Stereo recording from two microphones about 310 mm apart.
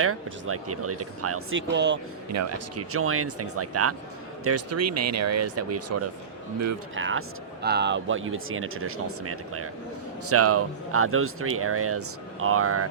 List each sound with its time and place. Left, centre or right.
0.0 s speech: right
2.3 s speech: right
6.9 s speech: right